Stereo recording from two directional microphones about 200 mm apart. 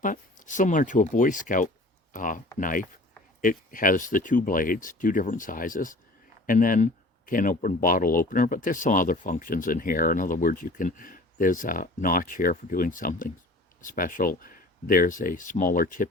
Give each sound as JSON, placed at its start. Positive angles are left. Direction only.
{"t": 0.0, "sound": "speech", "side_deg": 40}